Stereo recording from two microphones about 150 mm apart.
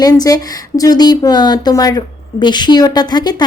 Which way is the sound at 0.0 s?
25° left (ahead or behind).